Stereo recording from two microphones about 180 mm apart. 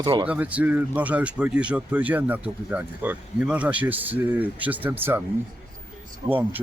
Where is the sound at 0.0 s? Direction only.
25° right (ahead or behind).